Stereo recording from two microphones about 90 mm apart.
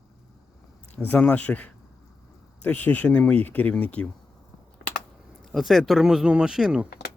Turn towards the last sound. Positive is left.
turn(degrees=-10)  # may be behind; listen again after turning